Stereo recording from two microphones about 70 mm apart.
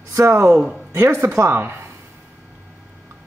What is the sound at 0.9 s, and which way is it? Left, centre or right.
Speech, right.